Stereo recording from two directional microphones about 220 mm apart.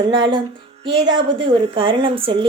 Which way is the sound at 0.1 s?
20° right (ahead or behind).